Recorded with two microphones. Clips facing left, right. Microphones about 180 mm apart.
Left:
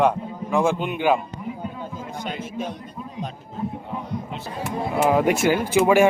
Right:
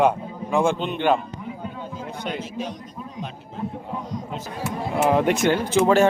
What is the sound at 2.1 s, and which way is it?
Speech, 55° right (ahead or behind).